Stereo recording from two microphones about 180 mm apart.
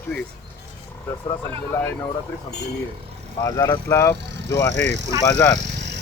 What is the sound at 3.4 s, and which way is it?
Speech, 20° left (ahead or behind).